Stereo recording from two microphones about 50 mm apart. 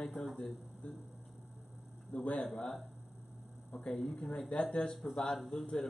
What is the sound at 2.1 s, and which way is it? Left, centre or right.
Speech, left.